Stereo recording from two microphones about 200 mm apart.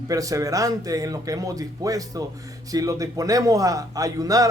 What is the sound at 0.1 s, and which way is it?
A man's voice, 15° right (ahead or behind).